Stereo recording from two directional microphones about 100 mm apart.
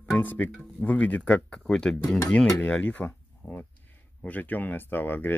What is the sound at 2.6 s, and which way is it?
Speech, 15° left (ahead or behind).